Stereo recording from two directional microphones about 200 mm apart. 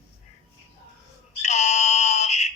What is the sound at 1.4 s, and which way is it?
Fire alarm, 35° left (ahead or behind).